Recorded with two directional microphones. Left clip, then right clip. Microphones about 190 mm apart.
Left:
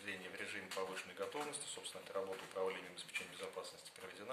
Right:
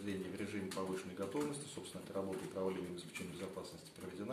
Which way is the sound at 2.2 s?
5° left (ahead or behind).